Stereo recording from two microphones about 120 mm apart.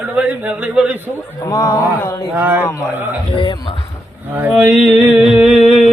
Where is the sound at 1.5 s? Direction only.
30° left (ahead or behind).